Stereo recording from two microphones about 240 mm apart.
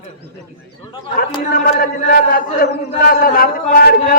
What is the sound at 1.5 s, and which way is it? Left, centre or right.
A man's voice, left.